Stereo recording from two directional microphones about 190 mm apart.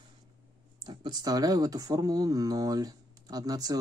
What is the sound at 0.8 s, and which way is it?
Speech, 20° right (ahead or behind).